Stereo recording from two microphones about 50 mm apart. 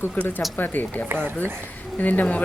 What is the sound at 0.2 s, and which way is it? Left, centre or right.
Speech, left.